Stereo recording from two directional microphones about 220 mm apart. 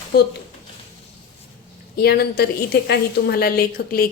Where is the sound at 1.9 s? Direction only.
45° left (ahead or behind).